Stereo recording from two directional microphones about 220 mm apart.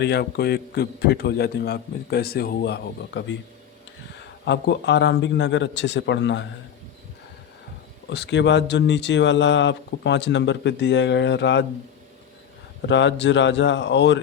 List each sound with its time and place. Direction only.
0.0 s speech: 45° left (ahead or behind)
4.4 s speech: 55° left (ahead or behind)
8.1 s speech: 50° left (ahead or behind)
12.8 s speech: 55° left (ahead or behind)